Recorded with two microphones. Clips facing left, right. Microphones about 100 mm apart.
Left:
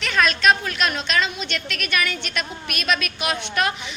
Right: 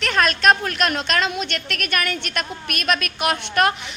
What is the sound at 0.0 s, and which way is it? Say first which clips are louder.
A child's voice: right 1 dB; 50° right (ahead or behind).